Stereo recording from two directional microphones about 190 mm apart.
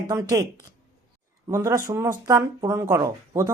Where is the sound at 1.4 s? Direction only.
15° right (ahead or behind).